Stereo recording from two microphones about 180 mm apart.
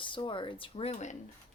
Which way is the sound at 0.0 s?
25° left (ahead or behind).